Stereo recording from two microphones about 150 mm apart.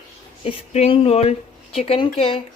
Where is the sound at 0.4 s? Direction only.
45° left (ahead or behind).